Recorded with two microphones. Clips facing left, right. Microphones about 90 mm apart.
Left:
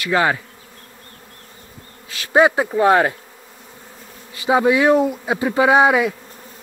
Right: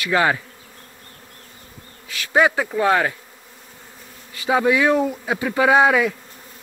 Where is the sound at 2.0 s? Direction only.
35° left (ahead or behind).